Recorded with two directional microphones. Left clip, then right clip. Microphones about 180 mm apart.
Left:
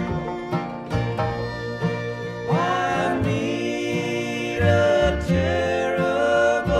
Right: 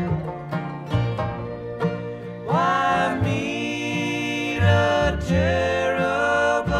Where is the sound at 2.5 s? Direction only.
35° right (ahead or behind).